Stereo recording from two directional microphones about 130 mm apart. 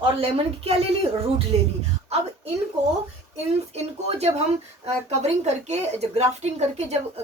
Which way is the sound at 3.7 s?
55° right (ahead or behind).